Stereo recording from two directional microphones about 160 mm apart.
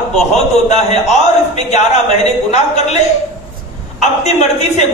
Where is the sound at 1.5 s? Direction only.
45° left (ahead or behind).